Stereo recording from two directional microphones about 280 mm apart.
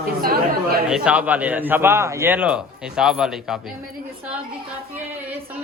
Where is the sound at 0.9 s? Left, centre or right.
Centre.